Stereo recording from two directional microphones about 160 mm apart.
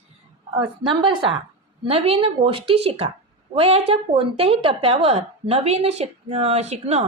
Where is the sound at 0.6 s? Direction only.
30° right (ahead or behind).